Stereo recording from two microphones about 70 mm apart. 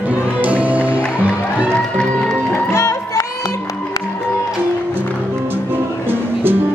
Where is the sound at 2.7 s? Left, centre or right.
Left.